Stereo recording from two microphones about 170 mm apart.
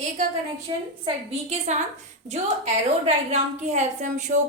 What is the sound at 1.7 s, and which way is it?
A woman's voice, 45° right (ahead or behind).